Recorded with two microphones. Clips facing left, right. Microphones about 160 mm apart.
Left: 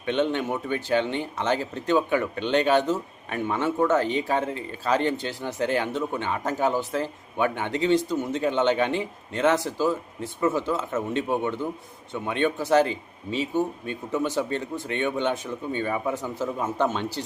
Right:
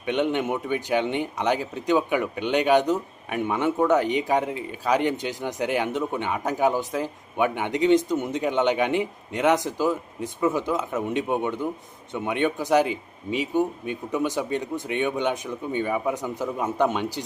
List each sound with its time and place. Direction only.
0.0 s speech: 15° right (ahead or behind)